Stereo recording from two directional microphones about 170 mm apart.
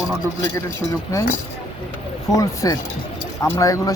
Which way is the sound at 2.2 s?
20° left (ahead or behind).